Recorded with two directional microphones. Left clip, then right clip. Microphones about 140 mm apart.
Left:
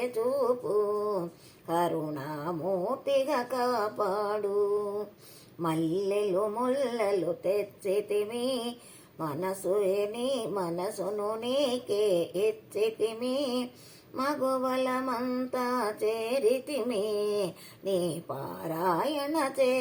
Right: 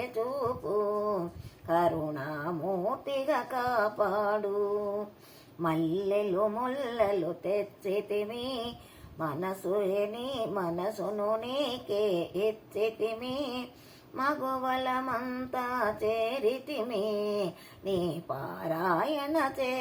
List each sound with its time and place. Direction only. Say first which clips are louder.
0.0 s speech: left 4 dB; 15° left (ahead or behind)
5.6 s speech: even; 15° left (ahead or behind)